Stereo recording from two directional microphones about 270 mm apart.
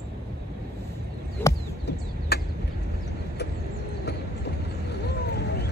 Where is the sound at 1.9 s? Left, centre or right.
Left.